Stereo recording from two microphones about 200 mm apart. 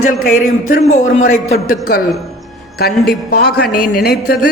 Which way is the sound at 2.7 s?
55° left (ahead or behind).